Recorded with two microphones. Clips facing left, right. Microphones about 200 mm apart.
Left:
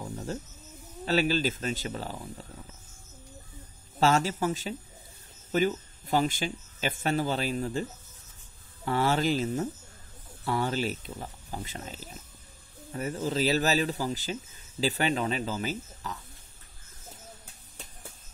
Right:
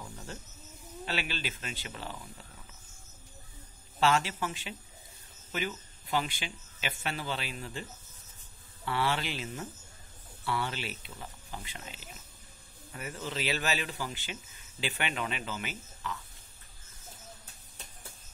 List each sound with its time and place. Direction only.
0.0 s music: 35° left (ahead or behind)
1.0 s a man's voice: 40° left (ahead or behind)
4.0 s a man's voice: 40° left (ahead or behind)
8.8 s a man's voice: 40° left (ahead or behind)